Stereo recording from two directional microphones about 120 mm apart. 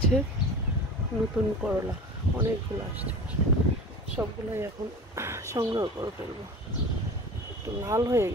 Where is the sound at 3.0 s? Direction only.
10° right (ahead or behind).